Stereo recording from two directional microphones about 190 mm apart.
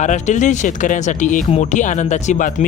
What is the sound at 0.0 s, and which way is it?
Speech, 40° left (ahead or behind).